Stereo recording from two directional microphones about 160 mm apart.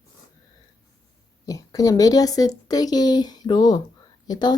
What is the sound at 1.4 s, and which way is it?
A woman's voice, 20° left (ahead or behind).